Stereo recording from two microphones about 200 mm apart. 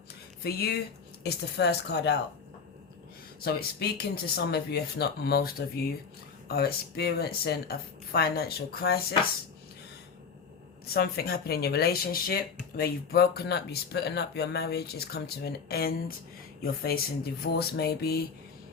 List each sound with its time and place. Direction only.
0.4 s speech: 50° left (ahead or behind)
3.4 s speech: 50° left (ahead or behind)
10.8 s speech: 50° left (ahead or behind)